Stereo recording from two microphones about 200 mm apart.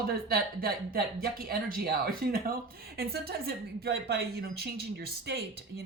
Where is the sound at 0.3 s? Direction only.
50° right (ahead or behind).